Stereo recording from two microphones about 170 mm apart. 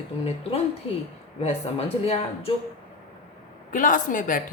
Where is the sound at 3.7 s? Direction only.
50° left (ahead or behind).